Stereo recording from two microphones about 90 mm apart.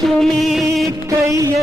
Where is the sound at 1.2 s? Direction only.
35° right (ahead or behind).